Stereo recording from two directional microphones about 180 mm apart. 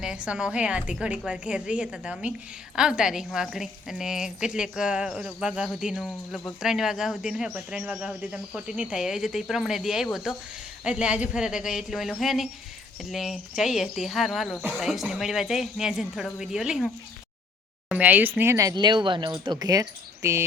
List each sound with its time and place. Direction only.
0.0 s a woman's voice: 5° right (ahead or behind)